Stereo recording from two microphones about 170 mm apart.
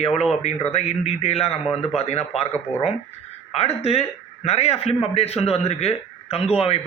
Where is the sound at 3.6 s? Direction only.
40° left (ahead or behind).